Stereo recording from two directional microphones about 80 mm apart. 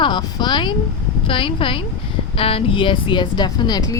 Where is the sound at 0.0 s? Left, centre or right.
Left.